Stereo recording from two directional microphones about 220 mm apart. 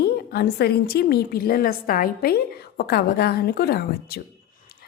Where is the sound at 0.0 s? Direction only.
45° left (ahead or behind).